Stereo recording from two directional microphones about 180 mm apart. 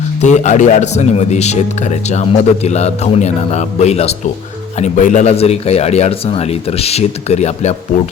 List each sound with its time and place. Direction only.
0.2 s speech: 40° left (ahead or behind)